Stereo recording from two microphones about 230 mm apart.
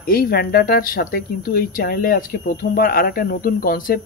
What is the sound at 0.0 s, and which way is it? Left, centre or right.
Speech, left.